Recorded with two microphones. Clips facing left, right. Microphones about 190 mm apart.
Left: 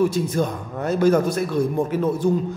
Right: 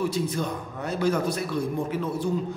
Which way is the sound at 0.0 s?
45° left (ahead or behind).